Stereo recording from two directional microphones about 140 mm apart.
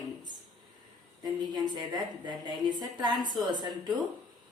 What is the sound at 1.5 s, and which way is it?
A woman's voice, 30° right (ahead or behind).